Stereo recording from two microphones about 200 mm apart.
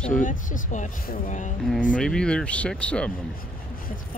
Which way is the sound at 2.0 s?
5° left (ahead or behind).